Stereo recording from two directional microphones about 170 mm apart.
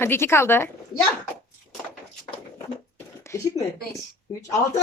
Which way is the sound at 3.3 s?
20° left (ahead or behind).